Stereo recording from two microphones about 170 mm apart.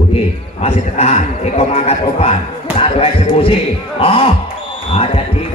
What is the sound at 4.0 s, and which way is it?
A man's voice, 35° left (ahead or behind).